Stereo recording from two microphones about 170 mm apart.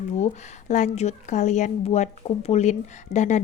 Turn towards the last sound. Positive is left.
turn(degrees=45)  # may be behind; listen again after turning